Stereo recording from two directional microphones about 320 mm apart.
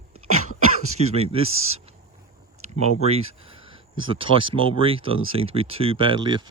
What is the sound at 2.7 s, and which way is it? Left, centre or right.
Speech, centre.